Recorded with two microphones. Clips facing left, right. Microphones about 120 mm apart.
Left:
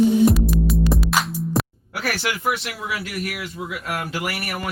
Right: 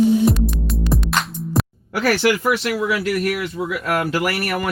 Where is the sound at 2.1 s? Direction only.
90° right.